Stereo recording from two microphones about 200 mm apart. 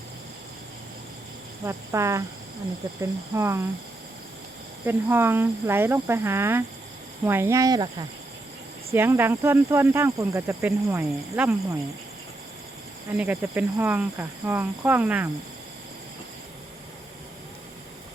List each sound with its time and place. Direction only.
1.6 s speech: 15° right (ahead or behind)
4.9 s speech: 10° right (ahead or behind)
13.1 s speech: 10° right (ahead or behind)